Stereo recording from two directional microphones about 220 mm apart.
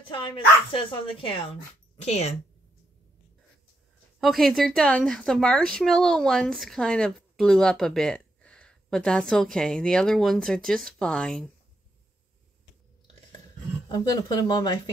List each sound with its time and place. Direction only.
0.1 s speech: 20° left (ahead or behind)
4.2 s speech: centre (ahead or behind)
13.8 s speech: 20° left (ahead or behind)